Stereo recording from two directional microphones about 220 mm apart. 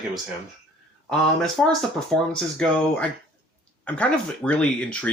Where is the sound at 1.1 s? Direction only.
5° left (ahead or behind).